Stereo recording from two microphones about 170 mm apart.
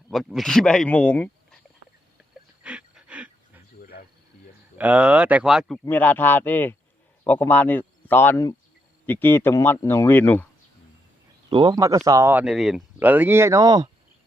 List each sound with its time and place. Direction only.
0.1 s speech: centre (ahead or behind)
2.6 s pant: 5° right (ahead or behind)
3.8 s insect: 65° left (ahead or behind)
4.8 s speech: 10° right (ahead or behind)
5.8 s speech: 10° left (ahead or behind)
11.4 s speech: 25° right (ahead or behind)